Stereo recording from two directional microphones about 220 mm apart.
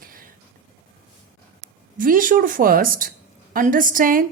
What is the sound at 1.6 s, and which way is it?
Speech, 40° right (ahead or behind).